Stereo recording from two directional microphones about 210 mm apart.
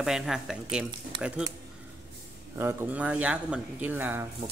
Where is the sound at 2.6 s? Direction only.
10° right (ahead or behind).